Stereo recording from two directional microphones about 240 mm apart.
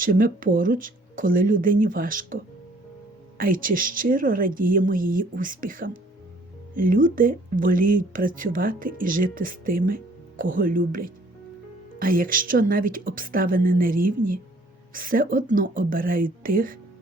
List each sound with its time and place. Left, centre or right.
0.0 s speech: right